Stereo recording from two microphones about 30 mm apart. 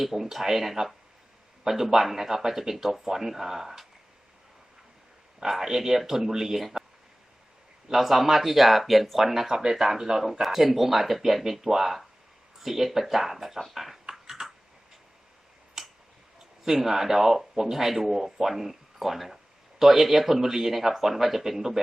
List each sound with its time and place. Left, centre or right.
0.0 s a man's voice: centre
5.4 s a man's voice: centre
7.9 s a man's voice: centre
14.1 s a sound: centre
15.8 s a sound: centre
16.6 s a man's voice: centre